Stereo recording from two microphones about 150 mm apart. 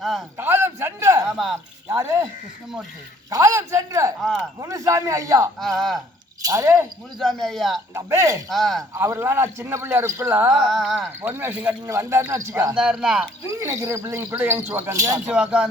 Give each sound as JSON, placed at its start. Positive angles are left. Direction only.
{"t": 0.0, "sound": "a sound", "side_deg": 0}
{"t": 0.3, "sound": "a sound", "side_deg": -15}
{"t": 2.0, "sound": "speech", "side_deg": -20}
{"t": 5.5, "sound": "speech", "side_deg": 0}
{"t": 6.4, "sound": "speech", "side_deg": -20}
{"t": 7.2, "sound": "speech", "side_deg": 0}
{"t": 7.9, "sound": "speech", "side_deg": -20}
{"t": 8.4, "sound": "speech", "side_deg": 0}
{"t": 9.0, "sound": "a man's voice", "side_deg": -15}
{"t": 10.5, "sound": "speech", "side_deg": 0}
{"t": 11.2, "sound": "a man's voice", "side_deg": -15}
{"t": 12.7, "sound": "speech", "side_deg": -5}
{"t": 13.4, "sound": "speech", "side_deg": -20}
{"t": 15.3, "sound": "speech", "side_deg": -5}